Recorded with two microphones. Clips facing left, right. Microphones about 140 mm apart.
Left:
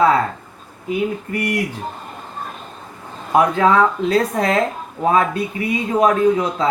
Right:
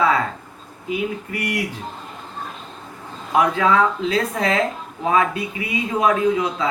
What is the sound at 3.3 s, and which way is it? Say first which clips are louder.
Speech: left 3 dB; 45° left (ahead or behind).